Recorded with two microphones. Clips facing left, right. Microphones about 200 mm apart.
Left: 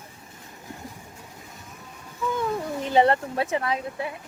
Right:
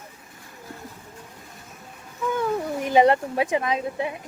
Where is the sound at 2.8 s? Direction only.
15° right (ahead or behind).